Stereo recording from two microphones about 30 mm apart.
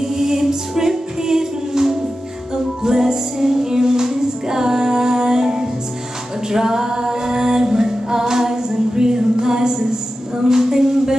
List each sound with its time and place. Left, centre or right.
0.0 s music: centre
6.5 s a capella: centre